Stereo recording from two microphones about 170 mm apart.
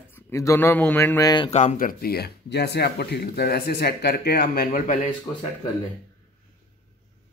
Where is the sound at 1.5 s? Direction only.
45° left (ahead or behind); by 4.9 s 60° left (ahead or behind).